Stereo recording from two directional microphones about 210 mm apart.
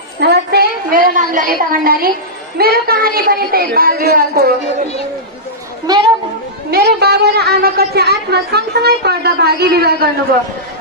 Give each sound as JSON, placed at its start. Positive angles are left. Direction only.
{"t": 0.2, "sound": "a woman's voice", "side_deg": -50}
{"t": 4.6, "sound": "speech", "side_deg": 30}
{"t": 5.9, "sound": "a child's voice", "side_deg": -20}
{"t": 6.7, "sound": "a woman's voice", "side_deg": -50}